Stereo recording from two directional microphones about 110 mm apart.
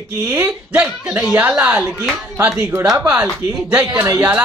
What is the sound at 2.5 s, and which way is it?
Speech, 20° right (ahead or behind).